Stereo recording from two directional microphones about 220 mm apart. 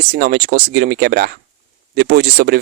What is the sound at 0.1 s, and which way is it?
Speech, 45° right (ahead or behind).